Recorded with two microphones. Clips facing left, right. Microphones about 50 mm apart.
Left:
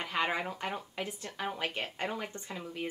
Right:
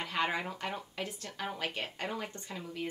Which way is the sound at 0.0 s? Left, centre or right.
Centre.